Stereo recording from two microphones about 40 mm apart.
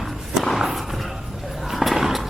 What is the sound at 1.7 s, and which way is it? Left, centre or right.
Roaring cats, centre.